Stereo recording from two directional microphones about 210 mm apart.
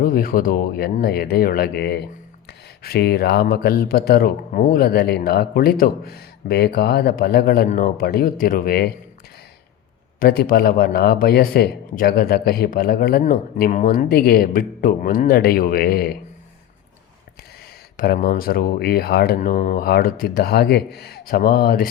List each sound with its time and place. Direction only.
0.0 s speech: 45° left (ahead or behind)
10.2 s speech: 45° left (ahead or behind)
17.9 s speech: 45° left (ahead or behind)